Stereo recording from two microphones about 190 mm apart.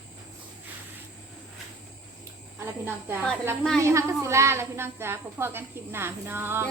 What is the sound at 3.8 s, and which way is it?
Speech, 15° right (ahead or behind).